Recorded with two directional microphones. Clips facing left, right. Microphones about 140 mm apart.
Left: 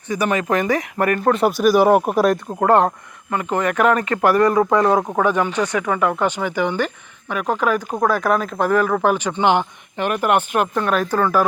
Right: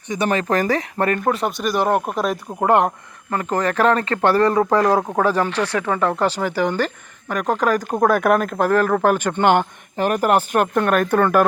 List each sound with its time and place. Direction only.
0.1 s speech: 20° right (ahead or behind)
0.5 s speech: 35° right (ahead or behind)
1.3 s speech: 5° left (ahead or behind)
2.6 s speech: 15° right (ahead or behind)
3.3 s speech: 35° right (ahead or behind)
4.8 s speech: centre (ahead or behind)
5.2 s speech: 35° right (ahead or behind)
8.0 s speech: 55° right (ahead or behind)
8.6 s speech: 40° right (ahead or behind)
10.8 s speech: 55° right (ahead or behind)